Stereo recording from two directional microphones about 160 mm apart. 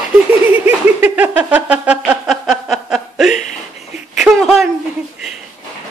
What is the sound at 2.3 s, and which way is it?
Chuckle, centre (ahead or behind).